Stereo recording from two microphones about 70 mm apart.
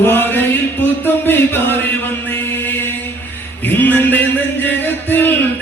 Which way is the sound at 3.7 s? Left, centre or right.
Left.